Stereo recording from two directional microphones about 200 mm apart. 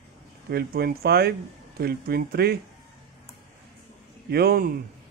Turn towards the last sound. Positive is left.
turn(degrees=-50)  # may be behind; listen again after turning